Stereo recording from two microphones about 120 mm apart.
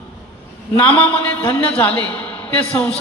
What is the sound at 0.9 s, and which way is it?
Speech, 15° left (ahead or behind).